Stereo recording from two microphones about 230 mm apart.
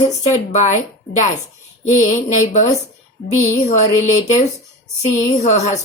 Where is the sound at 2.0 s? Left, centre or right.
Left.